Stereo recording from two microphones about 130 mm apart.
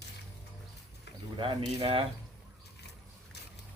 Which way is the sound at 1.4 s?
40° right (ahead or behind).